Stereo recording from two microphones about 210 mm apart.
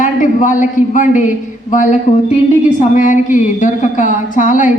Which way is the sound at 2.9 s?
40° left (ahead or behind).